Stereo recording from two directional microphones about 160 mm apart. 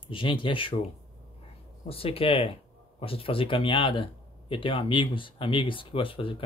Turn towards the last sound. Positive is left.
turn(degrees=35)  # may be behind; listen again after turning